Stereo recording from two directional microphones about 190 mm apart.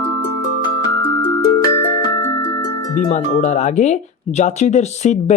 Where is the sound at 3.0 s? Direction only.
35° left (ahead or behind).